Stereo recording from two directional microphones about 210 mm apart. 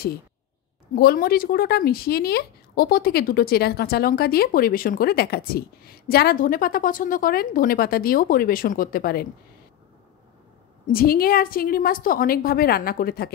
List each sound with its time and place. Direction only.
0.9 s speech: 45° left (ahead or behind)
10.9 s speech: 45° left (ahead or behind)